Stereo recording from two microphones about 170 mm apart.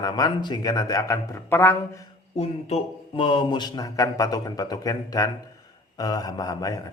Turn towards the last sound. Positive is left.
turn(degrees=20)  # may be behind; listen again after turning